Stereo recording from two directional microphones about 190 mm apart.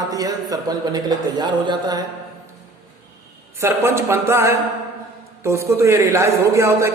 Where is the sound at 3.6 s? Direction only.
15° right (ahead or behind).